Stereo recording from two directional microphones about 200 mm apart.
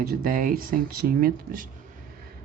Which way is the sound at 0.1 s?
45° right (ahead or behind).